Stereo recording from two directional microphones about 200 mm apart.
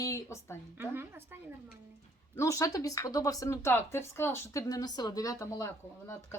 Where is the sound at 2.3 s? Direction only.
15° left (ahead or behind).